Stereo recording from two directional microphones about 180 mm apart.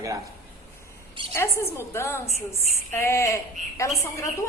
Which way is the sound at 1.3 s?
15° left (ahead or behind).